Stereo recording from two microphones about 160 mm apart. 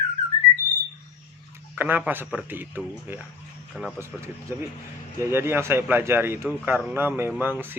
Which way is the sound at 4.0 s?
15° right (ahead or behind).